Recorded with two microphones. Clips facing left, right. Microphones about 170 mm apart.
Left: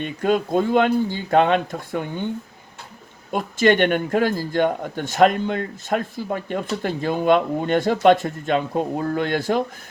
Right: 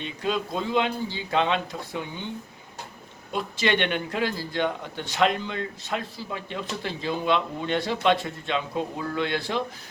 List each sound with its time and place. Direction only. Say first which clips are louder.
0.0 s a man's voice: left 7 dB; 50° left (ahead or behind)
3.3 s a man's voice: left 7 dB; 45° left (ahead or behind)